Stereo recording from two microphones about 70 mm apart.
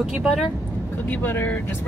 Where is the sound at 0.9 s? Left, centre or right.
Left.